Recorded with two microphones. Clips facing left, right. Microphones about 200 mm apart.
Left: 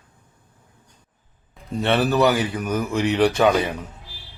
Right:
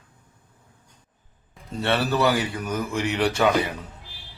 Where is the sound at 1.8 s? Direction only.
20° left (ahead or behind).